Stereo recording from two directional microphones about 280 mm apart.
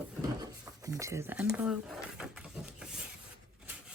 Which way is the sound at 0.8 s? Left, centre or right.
Centre.